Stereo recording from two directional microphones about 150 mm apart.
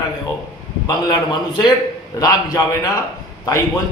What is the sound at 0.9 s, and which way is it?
Speech, 25° left (ahead or behind).